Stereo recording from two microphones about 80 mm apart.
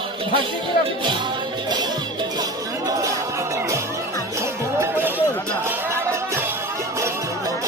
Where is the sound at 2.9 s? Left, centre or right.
Right.